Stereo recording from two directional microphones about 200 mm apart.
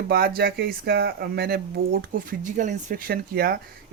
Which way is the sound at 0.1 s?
50° right (ahead or behind).